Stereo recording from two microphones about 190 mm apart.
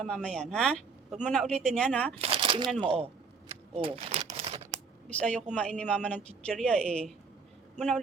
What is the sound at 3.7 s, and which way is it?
Crumpling, 30° right (ahead or behind).